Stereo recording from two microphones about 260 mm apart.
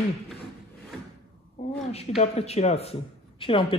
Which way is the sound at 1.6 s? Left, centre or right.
Left.